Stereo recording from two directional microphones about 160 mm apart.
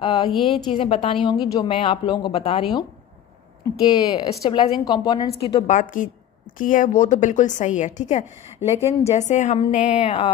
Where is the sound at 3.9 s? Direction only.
25° left (ahead or behind).